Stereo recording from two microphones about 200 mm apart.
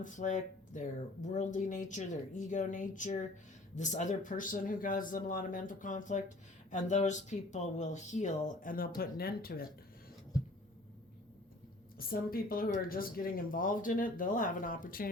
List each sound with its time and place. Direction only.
0.0 s speech: 40° left (ahead or behind)
11.9 s speech: 45° left (ahead or behind)